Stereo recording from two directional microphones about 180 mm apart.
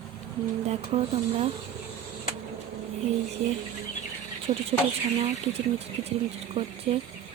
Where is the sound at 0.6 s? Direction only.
35° right (ahead or behind).